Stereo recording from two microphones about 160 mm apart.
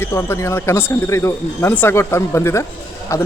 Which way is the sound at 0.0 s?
15° left (ahead or behind).